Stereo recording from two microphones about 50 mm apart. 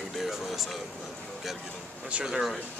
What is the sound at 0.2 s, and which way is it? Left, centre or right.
Music, centre.